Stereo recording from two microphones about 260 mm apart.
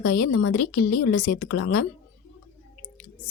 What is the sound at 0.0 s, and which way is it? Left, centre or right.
A woman's voice, left.